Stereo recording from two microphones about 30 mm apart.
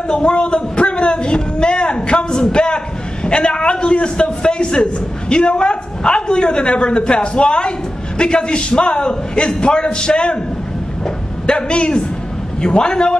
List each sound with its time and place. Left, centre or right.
0.1 s a man's voice: left
2.5 s a sound: left
3.3 s a man's voice: left
11.4 s a man's voice: left